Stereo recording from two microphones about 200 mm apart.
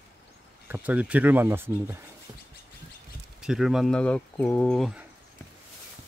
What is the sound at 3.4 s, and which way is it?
Speech, centre (ahead or behind).